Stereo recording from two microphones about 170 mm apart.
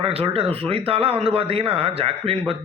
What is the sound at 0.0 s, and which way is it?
A man's voice, 35° right (ahead or behind).